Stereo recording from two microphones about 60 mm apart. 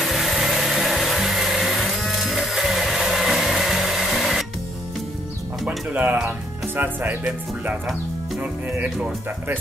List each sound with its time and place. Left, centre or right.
0.0 s music: centre
5.7 s music: right
6.8 s speech: right